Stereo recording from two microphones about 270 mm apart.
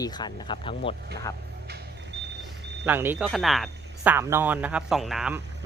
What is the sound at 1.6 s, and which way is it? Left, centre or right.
Vehicle, right.